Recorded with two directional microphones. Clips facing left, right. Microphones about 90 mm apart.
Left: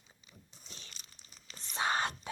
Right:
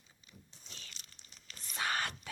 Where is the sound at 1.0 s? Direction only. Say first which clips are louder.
Left 1 dB; 80° right.